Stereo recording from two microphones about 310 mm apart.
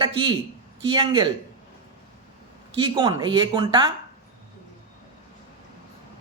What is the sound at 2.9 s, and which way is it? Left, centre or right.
Speech, centre.